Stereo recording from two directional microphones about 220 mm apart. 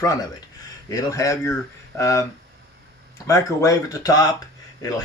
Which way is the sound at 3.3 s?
15° left (ahead or behind).